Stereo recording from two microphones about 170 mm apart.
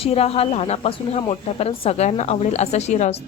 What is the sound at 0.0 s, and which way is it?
Speech, 35° left (ahead or behind).